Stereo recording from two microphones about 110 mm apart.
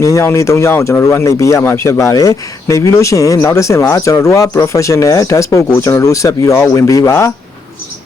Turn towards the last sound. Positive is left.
turn(degrees=25)  # may be behind; listen again after turning